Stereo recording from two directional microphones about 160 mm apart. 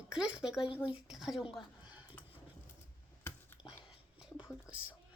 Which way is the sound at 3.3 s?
15° left (ahead or behind).